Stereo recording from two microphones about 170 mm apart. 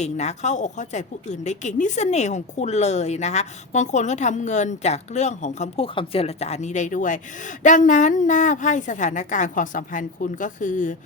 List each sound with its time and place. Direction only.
0.0 s a woman's voice: 40° left (ahead or behind)